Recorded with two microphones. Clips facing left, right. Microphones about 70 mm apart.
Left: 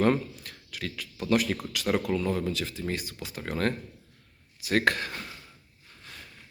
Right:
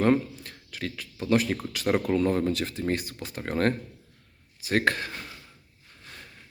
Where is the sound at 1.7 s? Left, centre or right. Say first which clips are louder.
Right 3 dB; right.